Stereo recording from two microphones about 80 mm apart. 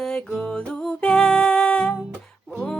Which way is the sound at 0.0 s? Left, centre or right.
Centre.